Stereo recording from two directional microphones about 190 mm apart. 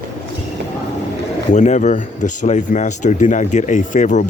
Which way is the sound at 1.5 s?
40° left (ahead or behind).